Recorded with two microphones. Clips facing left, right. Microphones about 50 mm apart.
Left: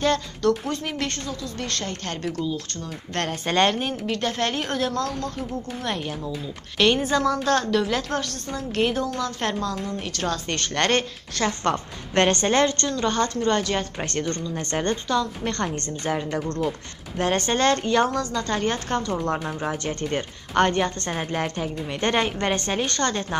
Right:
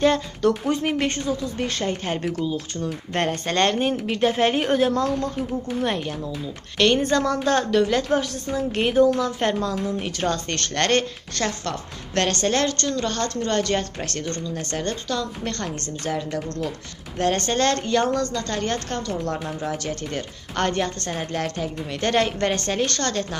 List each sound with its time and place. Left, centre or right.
0.0 s speech: centre
3.4 s a woman's voice: centre
10.5 s a woman's voice: centre
12.1 s a woman's voice: left
13.9 s a woman's voice: left
15.0 s a woman's voice: centre
17.2 s a woman's voice: centre; by 20.2 s left
20.5 s a woman's voice: centre